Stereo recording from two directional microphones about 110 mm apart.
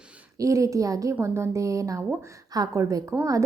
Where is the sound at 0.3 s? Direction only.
30° right (ahead or behind).